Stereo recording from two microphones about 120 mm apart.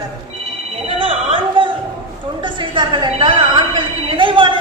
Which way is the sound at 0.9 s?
50° right (ahead or behind).